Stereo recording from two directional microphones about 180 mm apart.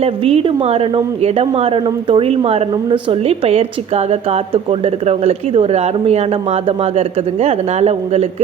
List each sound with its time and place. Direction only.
0.0 s a woman's voice: 35° right (ahead or behind)